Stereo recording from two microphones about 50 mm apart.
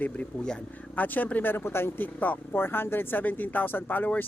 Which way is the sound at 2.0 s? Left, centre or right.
Left.